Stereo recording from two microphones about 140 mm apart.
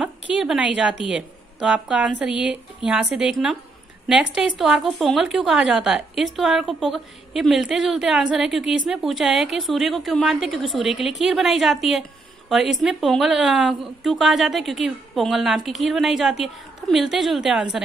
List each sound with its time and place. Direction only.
0.0 s a woman's voice: 5° right (ahead or behind)